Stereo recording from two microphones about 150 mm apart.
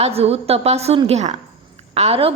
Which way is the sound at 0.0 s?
40° right (ahead or behind).